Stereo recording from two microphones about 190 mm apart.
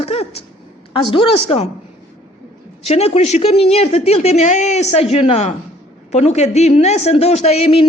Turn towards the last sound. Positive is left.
turn(degrees=30)  # may be behind; listen again after turning